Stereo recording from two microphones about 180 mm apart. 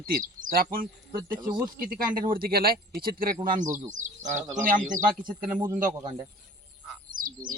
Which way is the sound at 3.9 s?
40° right (ahead or behind).